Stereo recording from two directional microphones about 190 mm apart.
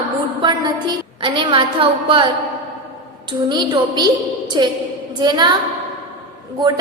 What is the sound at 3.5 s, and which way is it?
A woman's voice, 25° right (ahead or behind).